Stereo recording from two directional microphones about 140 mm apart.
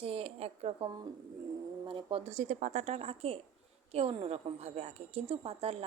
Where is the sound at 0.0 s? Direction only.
45° right (ahead or behind).